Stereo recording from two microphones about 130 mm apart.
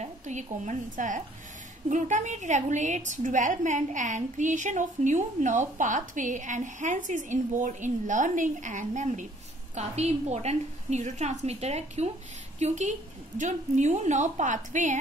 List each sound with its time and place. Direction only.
0.0 s a woman's voice: 65° right (ahead or behind)
9.8 s a woman's voice: 55° right (ahead or behind); by 15.0 s 70° right (ahead or behind)